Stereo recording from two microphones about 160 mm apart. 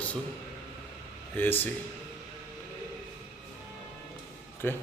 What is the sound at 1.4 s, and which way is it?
Speech, 10° left (ahead or behind).